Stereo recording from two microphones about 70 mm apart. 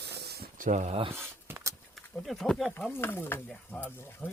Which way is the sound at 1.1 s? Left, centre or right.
Right.